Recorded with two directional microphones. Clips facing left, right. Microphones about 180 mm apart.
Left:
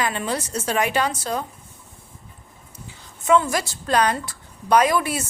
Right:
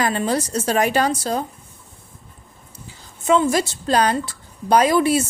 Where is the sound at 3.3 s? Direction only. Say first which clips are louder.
Right 2 dB; 25° right (ahead or behind).